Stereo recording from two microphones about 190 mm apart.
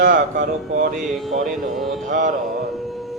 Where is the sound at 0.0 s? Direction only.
45° right (ahead or behind).